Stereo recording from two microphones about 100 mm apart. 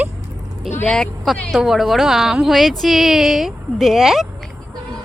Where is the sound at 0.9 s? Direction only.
5° left (ahead or behind).